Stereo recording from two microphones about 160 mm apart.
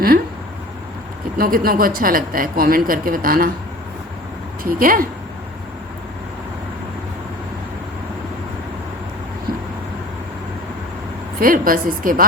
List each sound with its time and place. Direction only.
1.4 s a woman's voice: 65° right (ahead or behind)
4.6 s a woman's voice: 60° right (ahead or behind)
11.3 s a woman's voice: 60° right (ahead or behind)